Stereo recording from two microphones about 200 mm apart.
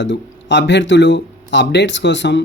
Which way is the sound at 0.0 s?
60° left (ahead or behind).